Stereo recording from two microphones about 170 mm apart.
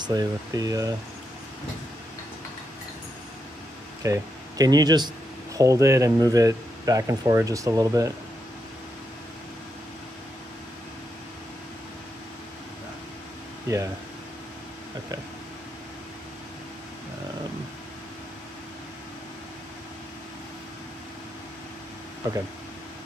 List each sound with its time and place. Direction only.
0.0 s speech: 25° right (ahead or behind)
4.0 s speech: 20° right (ahead or behind)
22.2 s speech: 20° right (ahead or behind)